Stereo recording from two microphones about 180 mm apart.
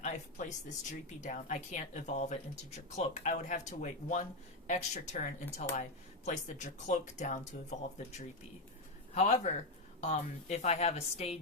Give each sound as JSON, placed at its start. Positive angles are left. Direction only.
{"t": 0.0, "sound": "speech", "side_deg": 40}
{"t": 9.1, "sound": "speech", "side_deg": 40}